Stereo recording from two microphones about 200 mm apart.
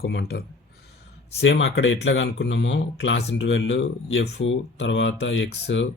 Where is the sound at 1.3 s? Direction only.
65° left (ahead or behind).